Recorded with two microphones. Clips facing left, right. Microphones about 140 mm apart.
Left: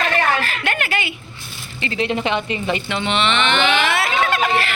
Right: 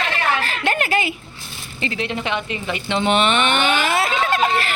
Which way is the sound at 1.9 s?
Centre (ahead or behind).